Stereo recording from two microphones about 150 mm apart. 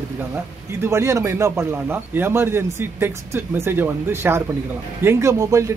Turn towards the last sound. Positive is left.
turn(degrees=-20)  # may be behind; listen again after turning